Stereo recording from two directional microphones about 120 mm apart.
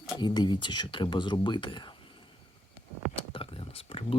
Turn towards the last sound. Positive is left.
turn(degrees=50)  # may be behind; listen again after turning